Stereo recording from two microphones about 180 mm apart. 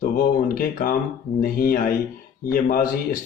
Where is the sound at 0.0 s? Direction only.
50° left (ahead or behind).